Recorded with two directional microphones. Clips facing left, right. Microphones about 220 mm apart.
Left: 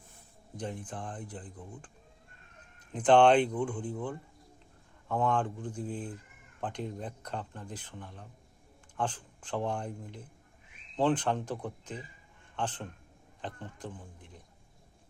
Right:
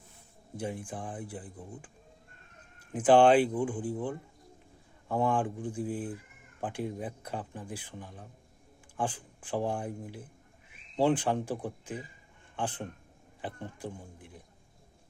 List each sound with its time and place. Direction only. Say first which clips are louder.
0.5 s speech: right 2 dB; 10° right (ahead or behind)
2.7 s speech: right 1 dB; 5° right (ahead or behind)